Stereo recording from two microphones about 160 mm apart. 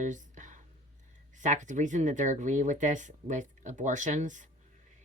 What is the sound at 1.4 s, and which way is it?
Speech, 50° right (ahead or behind).